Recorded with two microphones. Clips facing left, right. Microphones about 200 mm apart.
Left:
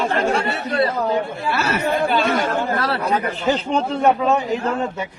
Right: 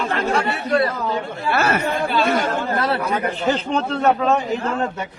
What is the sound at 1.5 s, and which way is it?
Speech, 55° right (ahead or behind).